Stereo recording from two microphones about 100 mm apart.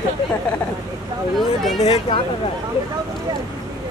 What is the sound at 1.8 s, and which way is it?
Speech, 90° left.